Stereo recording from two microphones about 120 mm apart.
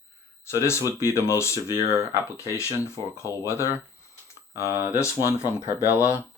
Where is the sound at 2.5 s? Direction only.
20° left (ahead or behind).